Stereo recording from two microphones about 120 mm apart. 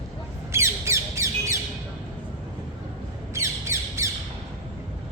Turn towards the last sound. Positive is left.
turn(degrees=-25)  # may be behind; listen again after turning